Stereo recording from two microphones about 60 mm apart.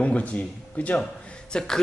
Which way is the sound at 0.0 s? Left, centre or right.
Left.